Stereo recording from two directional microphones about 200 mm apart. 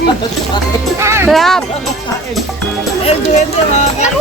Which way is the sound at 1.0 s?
15° right (ahead or behind).